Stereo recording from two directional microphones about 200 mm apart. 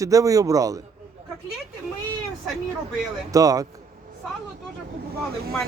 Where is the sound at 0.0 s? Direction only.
15° right (ahead or behind).